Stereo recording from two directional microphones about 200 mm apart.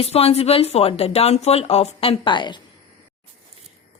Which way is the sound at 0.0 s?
30° left (ahead or behind).